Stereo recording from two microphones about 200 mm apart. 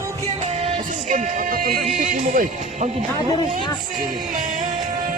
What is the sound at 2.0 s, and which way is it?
Speech, 40° right (ahead or behind).